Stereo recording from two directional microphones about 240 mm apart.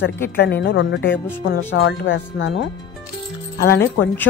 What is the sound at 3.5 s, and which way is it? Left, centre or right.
Speech, left.